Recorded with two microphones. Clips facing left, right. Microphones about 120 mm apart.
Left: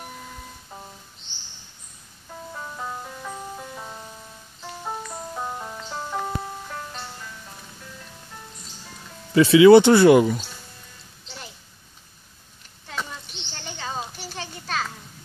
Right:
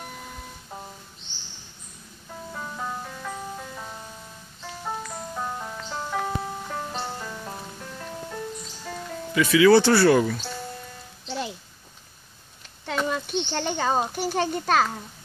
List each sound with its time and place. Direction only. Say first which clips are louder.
2.5 s music: right 1 dB; centre (ahead or behind)
6.9 s music: right 6 dB; 45° right (ahead or behind); by 8.4 s 65° right (ahead or behind)
9.3 s speech: left 5 dB; 30° left (ahead or behind)
13.0 s children playing: right 12 dB; 70° right (ahead or behind); by 14.9 s 50° right (ahead or behind)